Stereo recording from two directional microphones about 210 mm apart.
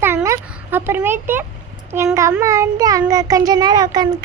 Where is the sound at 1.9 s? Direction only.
10° right (ahead or behind).